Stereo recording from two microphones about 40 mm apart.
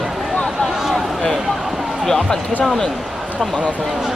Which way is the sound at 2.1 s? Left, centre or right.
Centre.